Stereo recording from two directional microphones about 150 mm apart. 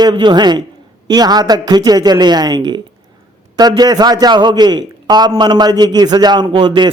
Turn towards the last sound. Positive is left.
turn(degrees=-30)  # may be behind; listen again after turning